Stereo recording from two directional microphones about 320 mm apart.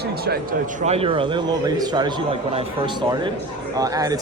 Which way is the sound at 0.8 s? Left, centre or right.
Centre.